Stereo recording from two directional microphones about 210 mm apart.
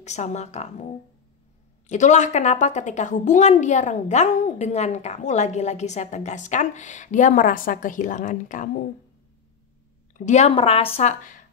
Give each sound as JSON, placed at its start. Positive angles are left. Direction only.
{"t": 0.0, "sound": "a woman's voice", "side_deg": 35}
{"t": 1.9, "sound": "a woman's voice", "side_deg": 35}
{"t": 10.1, "sound": "a woman's voice", "side_deg": 35}